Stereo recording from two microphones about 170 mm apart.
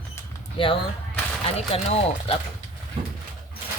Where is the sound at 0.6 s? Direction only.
30° left (ahead or behind).